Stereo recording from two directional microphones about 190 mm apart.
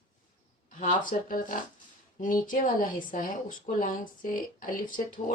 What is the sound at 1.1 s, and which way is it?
Speech, 45° left (ahead or behind).